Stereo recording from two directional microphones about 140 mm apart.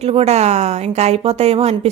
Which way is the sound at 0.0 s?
50° right (ahead or behind).